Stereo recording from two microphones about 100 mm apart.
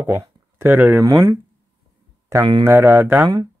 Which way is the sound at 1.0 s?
40° right (ahead or behind).